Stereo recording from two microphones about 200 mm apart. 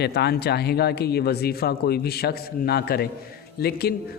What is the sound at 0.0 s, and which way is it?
A man's voice, 55° left (ahead or behind).